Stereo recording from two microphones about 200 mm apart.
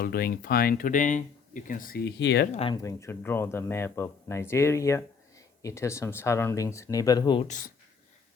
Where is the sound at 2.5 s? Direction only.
30° left (ahead or behind).